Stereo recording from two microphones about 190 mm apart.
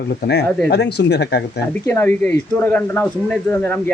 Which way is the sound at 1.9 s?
10° left (ahead or behind).